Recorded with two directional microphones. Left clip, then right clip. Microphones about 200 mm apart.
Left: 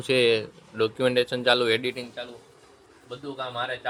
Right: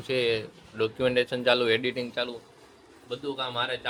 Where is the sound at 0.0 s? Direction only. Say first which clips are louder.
Left 5 dB; 25° left (ahead or behind).